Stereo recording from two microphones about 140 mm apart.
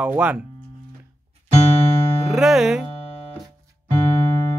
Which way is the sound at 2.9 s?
40° left (ahead or behind).